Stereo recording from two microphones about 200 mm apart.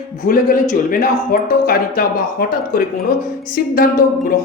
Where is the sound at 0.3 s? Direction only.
50° left (ahead or behind).